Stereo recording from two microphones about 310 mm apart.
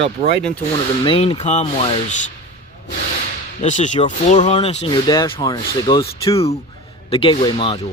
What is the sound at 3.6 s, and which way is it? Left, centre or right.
Speech, left.